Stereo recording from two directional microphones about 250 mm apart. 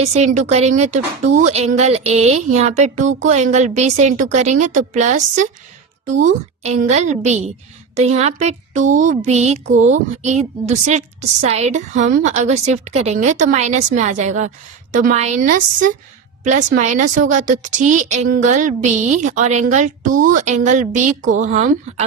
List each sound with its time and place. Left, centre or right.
0.0 s a woman's voice: right